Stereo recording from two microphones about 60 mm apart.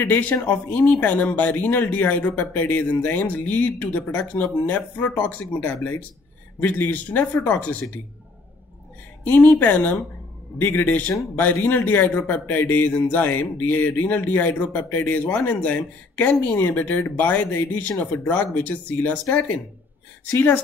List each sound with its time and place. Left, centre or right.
0.0 s a man's voice: left
9.2 s a man's voice: left
20.3 s a man's voice: left